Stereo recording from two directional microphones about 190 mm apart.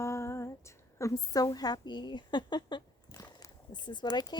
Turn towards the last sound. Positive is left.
turn(degrees=20)  # may be behind; listen again after turning